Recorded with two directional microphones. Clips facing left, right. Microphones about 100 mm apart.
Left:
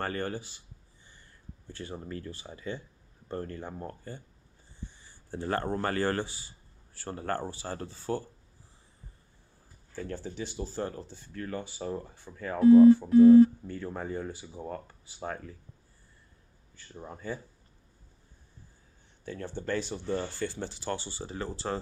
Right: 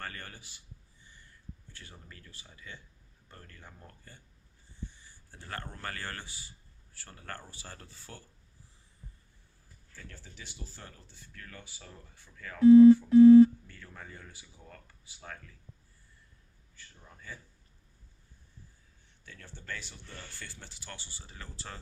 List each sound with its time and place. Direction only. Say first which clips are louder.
0.0 s speech: left 11 dB; 35° left (ahead or behind)
1.7 s speech: left 14 dB; 30° left (ahead or behind)
9.9 s speech: left 15 dB; 30° left (ahead or behind)
16.7 s speech: left 12 dB; 30° left (ahead or behind)
19.2 s speech: left 15 dB; 35° left (ahead or behind)